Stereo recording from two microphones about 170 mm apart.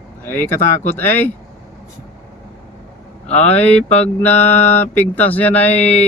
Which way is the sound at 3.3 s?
40° left (ahead or behind).